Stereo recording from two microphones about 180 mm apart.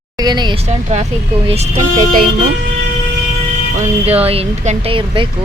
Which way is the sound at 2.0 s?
50° right (ahead or behind).